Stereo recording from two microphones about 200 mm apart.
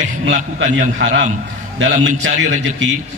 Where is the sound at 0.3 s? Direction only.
60° right (ahead or behind).